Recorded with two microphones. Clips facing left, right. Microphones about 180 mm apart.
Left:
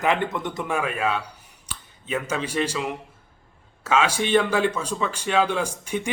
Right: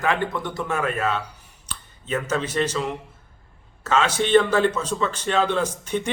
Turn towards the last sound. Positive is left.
turn(degrees=10)  # may be behind; listen again after turning